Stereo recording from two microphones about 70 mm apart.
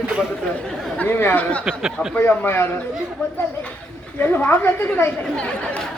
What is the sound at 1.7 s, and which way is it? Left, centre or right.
Speech, centre.